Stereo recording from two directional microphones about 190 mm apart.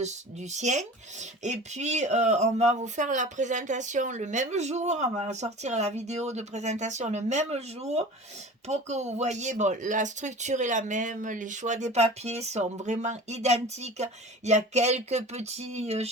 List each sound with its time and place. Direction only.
0.5 s speech: 40° right (ahead or behind)